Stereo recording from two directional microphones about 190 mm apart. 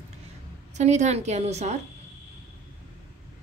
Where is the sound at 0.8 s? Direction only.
40° right (ahead or behind).